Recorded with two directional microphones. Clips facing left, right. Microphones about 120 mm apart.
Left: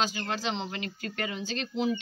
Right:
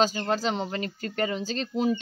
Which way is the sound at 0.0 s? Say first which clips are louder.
Right 6 dB; 35° right (ahead or behind).